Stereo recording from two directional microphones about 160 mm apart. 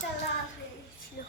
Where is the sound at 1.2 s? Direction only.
65° left (ahead or behind).